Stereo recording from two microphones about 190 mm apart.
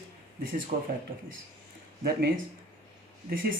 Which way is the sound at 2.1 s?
60° right (ahead or behind).